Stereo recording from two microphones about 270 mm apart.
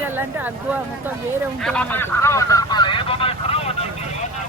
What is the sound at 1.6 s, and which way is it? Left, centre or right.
Speech, centre.